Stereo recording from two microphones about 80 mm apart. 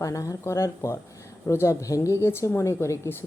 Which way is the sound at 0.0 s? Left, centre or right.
Left.